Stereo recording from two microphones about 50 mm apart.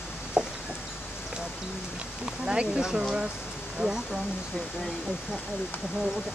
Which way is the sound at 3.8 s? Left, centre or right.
Right.